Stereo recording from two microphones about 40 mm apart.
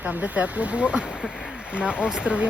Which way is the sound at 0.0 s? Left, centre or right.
Right.